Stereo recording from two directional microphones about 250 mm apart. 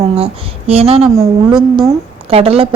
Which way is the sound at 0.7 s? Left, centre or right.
Right.